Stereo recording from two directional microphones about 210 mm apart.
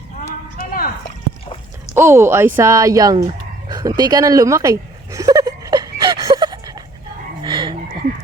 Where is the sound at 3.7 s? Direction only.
15° right (ahead or behind).